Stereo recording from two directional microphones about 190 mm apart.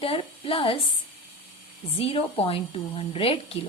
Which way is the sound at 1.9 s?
30° left (ahead or behind).